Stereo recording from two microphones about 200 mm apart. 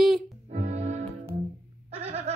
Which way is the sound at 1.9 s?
30° right (ahead or behind).